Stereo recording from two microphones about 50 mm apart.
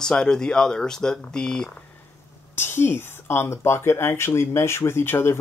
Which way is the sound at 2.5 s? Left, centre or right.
Left.